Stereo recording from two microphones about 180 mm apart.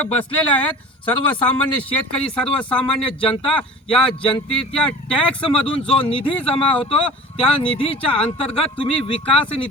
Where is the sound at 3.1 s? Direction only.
30° left (ahead or behind).